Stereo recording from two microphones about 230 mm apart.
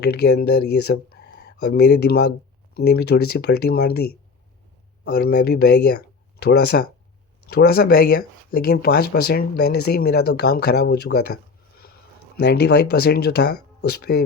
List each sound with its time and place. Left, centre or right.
0.0 s speech: left
5.0 s speech: left
12.4 s speech: left